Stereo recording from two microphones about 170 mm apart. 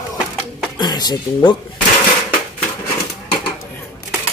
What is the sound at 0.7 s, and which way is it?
Speech, 25° left (ahead or behind).